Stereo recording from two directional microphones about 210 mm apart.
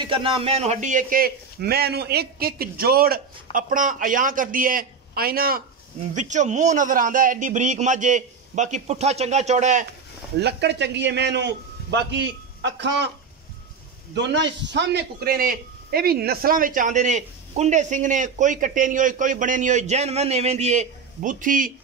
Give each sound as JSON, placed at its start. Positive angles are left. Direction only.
{"t": 0.0, "sound": "a man's voice", "side_deg": -25}
{"t": 10.4, "sound": "a man's voice", "side_deg": -55}
{"t": 14.1, "sound": "a man's voice", "side_deg": -55}